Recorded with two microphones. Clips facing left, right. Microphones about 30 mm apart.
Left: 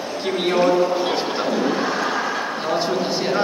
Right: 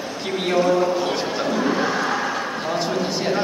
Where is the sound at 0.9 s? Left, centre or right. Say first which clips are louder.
Left 1 dB; centre.